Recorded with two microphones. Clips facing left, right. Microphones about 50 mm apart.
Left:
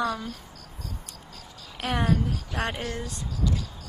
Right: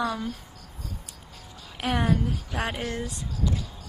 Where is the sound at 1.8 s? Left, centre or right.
Centre.